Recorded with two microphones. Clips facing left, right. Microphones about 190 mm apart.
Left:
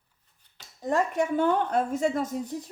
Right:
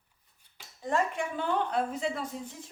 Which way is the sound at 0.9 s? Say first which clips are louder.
Left 5 dB; 45° left (ahead or behind).